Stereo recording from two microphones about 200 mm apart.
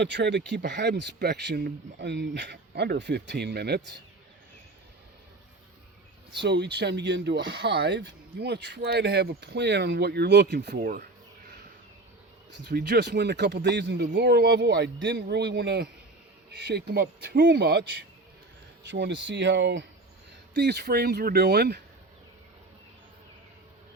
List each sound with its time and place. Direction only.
0.0 s speech: 60° right (ahead or behind)
6.4 s speech: 55° right (ahead or behind)
12.5 s speech: 60° right (ahead or behind)